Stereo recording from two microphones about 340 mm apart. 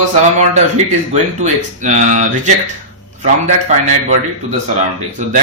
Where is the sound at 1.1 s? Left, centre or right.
Right.